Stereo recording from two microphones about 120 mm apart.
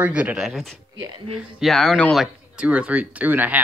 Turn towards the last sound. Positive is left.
turn(degrees=-15)  # may be behind; listen again after turning